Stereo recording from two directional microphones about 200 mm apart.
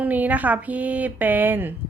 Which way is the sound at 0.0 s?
10° right (ahead or behind).